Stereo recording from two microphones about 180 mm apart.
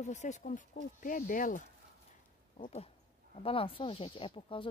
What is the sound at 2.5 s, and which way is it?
Speech, 35° left (ahead or behind).